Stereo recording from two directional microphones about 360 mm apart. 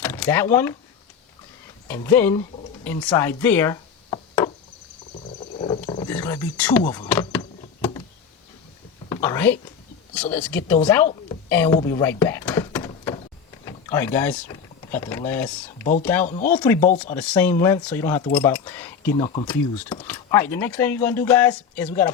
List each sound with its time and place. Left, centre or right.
0.0 s speech: centre
1.9 s speech: centre
5.5 s wild animals: centre
6.8 s power windows: centre
9.0 s a sound: centre
10.2 s speech: centre
11.4 s a sound: centre
13.7 s speech: centre
16.2 s speech: left
17.2 s speech: centre
18.3 s a sound: centre
19.5 s speech: centre